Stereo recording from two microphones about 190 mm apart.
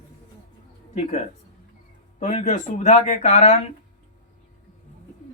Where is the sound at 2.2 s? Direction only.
35° left (ahead or behind).